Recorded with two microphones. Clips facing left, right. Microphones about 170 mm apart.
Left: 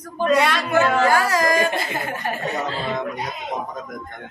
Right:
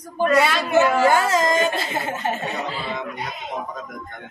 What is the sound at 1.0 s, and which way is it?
Speech, 25° right (ahead or behind).